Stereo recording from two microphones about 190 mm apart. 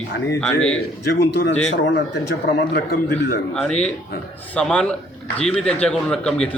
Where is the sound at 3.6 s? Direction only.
5° left (ahead or behind).